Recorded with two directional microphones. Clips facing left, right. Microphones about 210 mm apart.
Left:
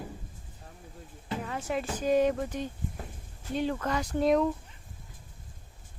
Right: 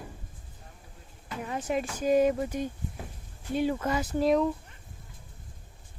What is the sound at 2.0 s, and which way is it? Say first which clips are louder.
Speech: right 2 dB; 10° right (ahead or behind).